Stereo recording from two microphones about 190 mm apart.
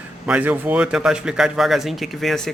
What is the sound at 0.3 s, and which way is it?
Speech, 10° right (ahead or behind).